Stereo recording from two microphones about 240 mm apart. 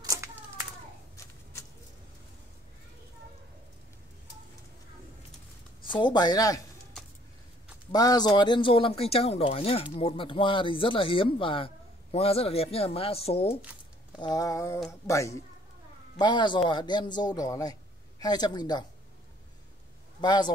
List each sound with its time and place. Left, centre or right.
0.0 s a sound: centre
5.9 s speech: centre
7.9 s a man's voice: centre
20.2 s speech: centre